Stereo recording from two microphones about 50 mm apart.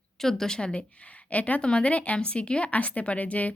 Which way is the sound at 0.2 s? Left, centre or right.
Centre.